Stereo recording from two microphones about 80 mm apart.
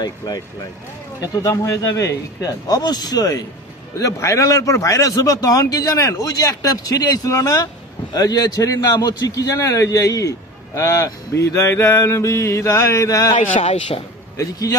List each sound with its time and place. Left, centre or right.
0.0 s speech: left
2.8 s speech: left
4.0 s a man's voice: left
14.3 s speech: left